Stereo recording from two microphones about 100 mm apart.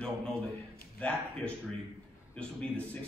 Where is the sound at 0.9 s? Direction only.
10° left (ahead or behind).